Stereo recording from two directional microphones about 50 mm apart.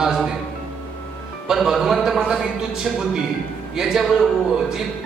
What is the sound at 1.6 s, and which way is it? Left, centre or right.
Speech, centre.